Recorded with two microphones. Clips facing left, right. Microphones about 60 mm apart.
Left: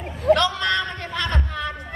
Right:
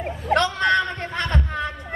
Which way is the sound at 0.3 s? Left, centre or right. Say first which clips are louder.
Left 1 dB; right.